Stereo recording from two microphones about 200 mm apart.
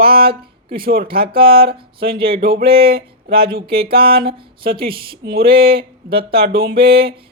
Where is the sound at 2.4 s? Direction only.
50° right (ahead or behind).